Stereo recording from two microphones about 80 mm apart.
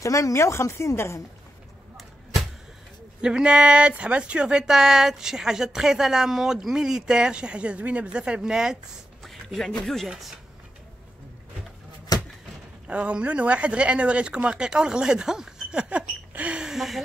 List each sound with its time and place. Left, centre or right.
0.0 s speech: left
3.2 s a man's voice: centre
12.1 s a sound: left
12.8 s speech: centre